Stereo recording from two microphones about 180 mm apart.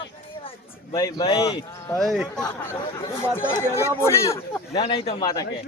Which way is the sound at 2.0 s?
Centre (ahead or behind).